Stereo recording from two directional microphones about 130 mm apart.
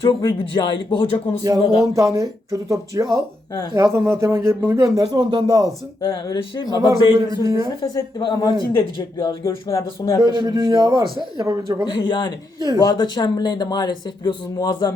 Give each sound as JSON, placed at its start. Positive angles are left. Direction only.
{"t": 0.0, "sound": "speech", "side_deg": 30}
{"t": 2.0, "sound": "speech", "side_deg": -25}
{"t": 5.6, "sound": "speech", "side_deg": 25}
{"t": 7.4, "sound": "speech", "side_deg": -25}
{"t": 7.9, "sound": "speech", "side_deg": 30}
{"t": 10.2, "sound": "a man's voice", "side_deg": -35}
{"t": 11.9, "sound": "speech", "side_deg": 35}
{"t": 12.5, "sound": "a man's voice", "side_deg": -30}
{"t": 12.8, "sound": "speech", "side_deg": 30}